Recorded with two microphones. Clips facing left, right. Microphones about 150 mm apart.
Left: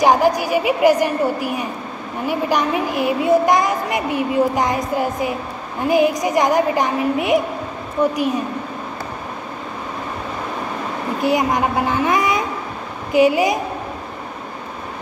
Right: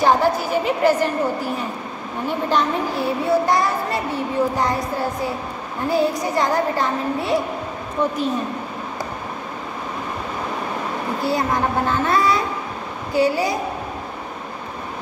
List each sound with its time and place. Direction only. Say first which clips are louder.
0.0 s a woman's voice: left 2 dB; 15° left (ahead or behind)
11.1 s a woman's voice: left 4 dB; 15° left (ahead or behind)